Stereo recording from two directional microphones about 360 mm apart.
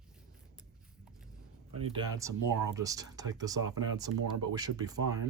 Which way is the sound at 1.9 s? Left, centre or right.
Centre.